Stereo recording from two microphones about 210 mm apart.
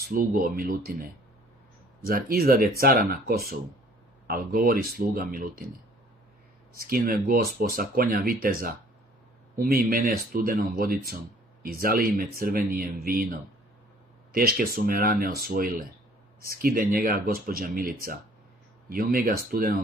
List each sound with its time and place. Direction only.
0.0 s speech: 45° right (ahead or behind)
6.7 s speech: 45° right (ahead or behind)
14.3 s speech: 45° right (ahead or behind)